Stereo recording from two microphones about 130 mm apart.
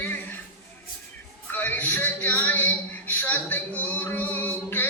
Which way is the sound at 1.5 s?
15° left (ahead or behind).